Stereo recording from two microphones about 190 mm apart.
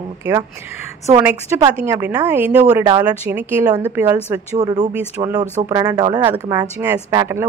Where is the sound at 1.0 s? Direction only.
15° right (ahead or behind).